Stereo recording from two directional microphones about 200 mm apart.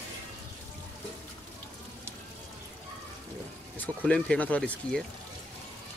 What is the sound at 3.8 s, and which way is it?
Speech, 5° left (ahead or behind).